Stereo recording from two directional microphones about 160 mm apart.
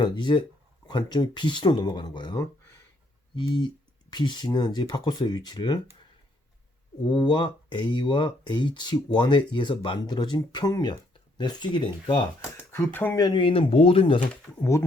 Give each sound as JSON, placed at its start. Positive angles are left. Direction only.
{"t": 0.0, "sound": "speech", "side_deg": 30}
{"t": 4.1, "sound": "speech", "side_deg": 25}
{"t": 7.0, "sound": "speech", "side_deg": 25}
{"t": 12.5, "sound": "speech", "side_deg": 15}
{"t": 13.1, "sound": "speech", "side_deg": 25}
{"t": 14.6, "sound": "speech", "side_deg": 20}